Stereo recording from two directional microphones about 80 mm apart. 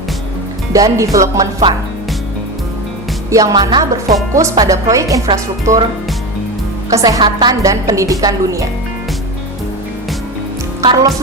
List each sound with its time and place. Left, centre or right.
0.7 s speech: right
3.2 s speech: right
6.9 s speech: right
7.2 s a woman's voice: right
7.6 s speech: right